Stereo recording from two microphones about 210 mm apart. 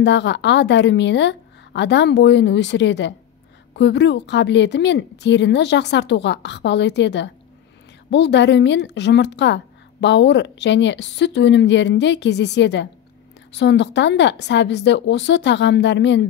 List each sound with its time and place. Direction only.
0.0 s a woman's voice: 55° left (ahead or behind)